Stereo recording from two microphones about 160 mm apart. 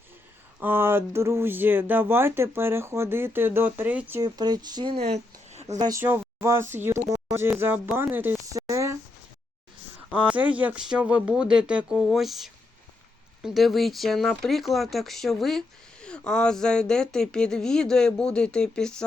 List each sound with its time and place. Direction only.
0.6 s speech: 15° right (ahead or behind)
4.2 s speech: 25° right (ahead or behind); by 5.6 s 45° right (ahead or behind)
5.6 s speech: 20° right (ahead or behind)
8.1 s a sound: 10° right (ahead or behind)
10.1 s speech: 10° right (ahead or behind)